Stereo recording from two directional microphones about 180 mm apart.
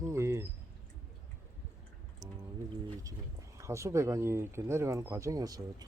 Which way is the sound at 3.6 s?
15° right (ahead or behind).